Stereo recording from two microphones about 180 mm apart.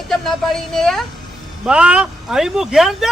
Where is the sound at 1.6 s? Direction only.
5° right (ahead or behind).